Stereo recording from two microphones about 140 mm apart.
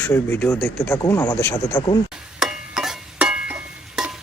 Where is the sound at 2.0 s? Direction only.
5° right (ahead or behind).